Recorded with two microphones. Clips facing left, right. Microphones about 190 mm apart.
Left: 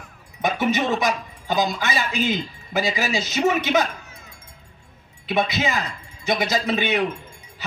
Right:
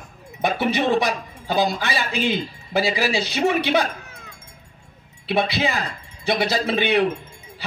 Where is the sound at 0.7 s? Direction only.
35° right (ahead or behind).